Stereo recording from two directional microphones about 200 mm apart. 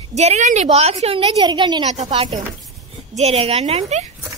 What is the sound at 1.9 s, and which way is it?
A woman's voice, 35° right (ahead or behind).